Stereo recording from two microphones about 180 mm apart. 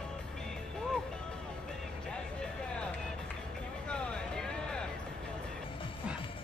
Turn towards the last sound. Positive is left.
turn(degrees=5)  # may be behind; listen again after turning